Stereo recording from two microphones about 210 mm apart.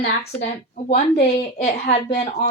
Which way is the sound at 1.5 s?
35° left (ahead or behind).